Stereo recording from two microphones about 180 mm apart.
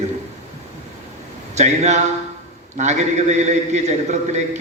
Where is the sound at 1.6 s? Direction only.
40° right (ahead or behind).